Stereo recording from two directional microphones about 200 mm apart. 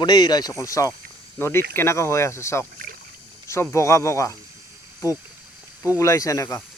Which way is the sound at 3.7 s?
15° left (ahead or behind).